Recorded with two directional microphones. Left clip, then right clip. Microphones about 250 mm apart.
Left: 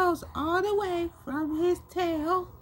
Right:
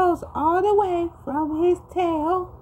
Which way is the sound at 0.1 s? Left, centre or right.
Left.